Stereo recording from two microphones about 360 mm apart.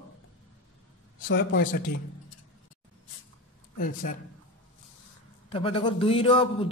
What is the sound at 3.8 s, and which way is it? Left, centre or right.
Speech, left.